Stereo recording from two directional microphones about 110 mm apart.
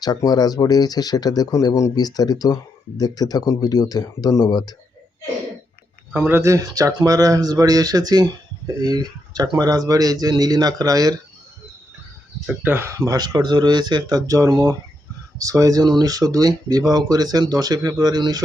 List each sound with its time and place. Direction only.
0.0 s speech: 35° left (ahead or behind)
6.2 s speech: 25° right (ahead or behind)
12.6 s speech: 20° right (ahead or behind)
13.1 s speech: 35° right (ahead or behind)